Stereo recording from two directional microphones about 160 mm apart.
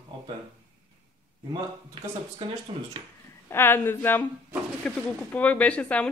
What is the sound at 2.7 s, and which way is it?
Speech, 35° right (ahead or behind).